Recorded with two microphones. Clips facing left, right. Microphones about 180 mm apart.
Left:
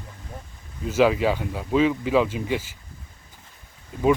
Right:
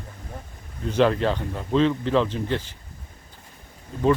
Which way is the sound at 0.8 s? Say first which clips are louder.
Left 1 dB; 5° left (ahead or behind).